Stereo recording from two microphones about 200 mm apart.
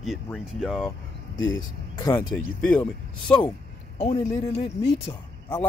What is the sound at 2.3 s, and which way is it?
Speech, 5° left (ahead or behind).